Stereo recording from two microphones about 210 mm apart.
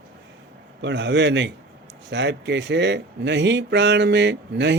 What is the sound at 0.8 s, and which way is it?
Speech, 55° right (ahead or behind).